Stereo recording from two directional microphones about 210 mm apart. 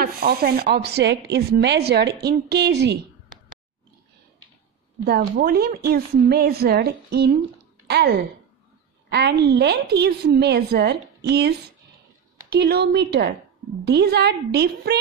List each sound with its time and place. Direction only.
0.0 s speech: 45° right (ahead or behind)
5.0 s speech: 45° right (ahead or behind)